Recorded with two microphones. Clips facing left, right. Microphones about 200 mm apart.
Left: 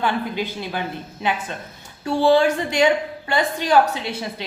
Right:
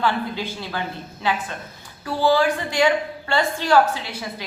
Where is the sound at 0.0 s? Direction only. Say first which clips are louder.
Left 1 dB; 15° left (ahead or behind).